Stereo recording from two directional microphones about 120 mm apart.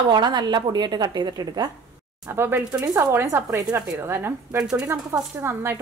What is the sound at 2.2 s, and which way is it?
Speech, 20° right (ahead or behind).